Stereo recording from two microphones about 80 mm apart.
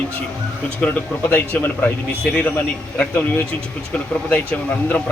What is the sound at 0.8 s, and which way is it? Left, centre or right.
Speech, centre.